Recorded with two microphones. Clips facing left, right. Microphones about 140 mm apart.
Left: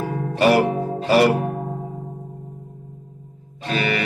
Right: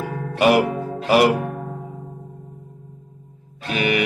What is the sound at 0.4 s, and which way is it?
Music, 15° right (ahead or behind).